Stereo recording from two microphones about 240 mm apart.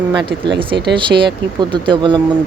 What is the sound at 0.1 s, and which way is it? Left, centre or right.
Speech, centre.